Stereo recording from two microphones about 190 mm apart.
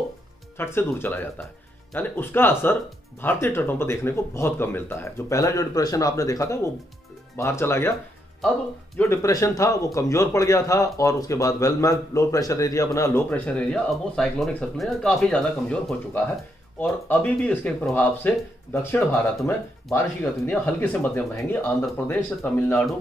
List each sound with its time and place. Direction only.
0.6 s speech: 10° left (ahead or behind)
8.9 s speech: 15° left (ahead or behind)